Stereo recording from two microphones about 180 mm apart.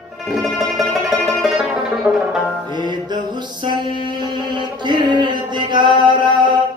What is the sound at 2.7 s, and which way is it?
Music, 25° right (ahead or behind).